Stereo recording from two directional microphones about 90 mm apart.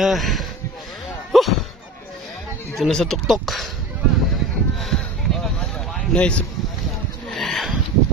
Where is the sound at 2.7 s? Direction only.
Centre (ahead or behind).